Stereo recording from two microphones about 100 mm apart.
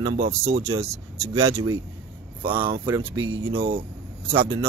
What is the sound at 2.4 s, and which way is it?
Speech, 55° right (ahead or behind).